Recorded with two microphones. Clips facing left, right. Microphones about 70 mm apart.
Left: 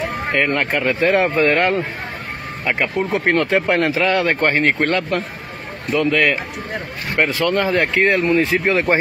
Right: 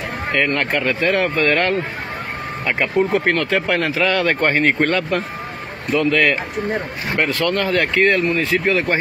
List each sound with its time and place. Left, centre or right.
0.3 s speech: centre
0.9 s speech: left
1.4 s speech: centre
3.1 s speech: centre
4.0 s speech: centre; by 8.9 s left